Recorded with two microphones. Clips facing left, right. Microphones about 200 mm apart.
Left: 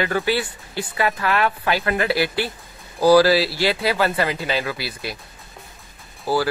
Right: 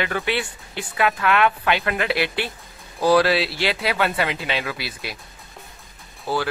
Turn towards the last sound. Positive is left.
turn(degrees=5)  # may be behind; listen again after turning